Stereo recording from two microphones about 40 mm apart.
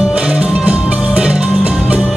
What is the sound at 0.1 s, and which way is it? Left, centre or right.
Music, right.